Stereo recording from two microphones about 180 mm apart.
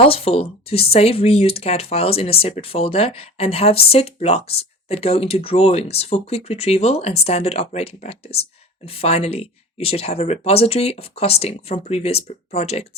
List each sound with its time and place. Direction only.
0.0 s speech: 35° left (ahead or behind)